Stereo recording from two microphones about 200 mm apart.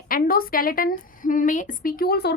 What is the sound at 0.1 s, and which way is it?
A woman's voice, 45° left (ahead or behind).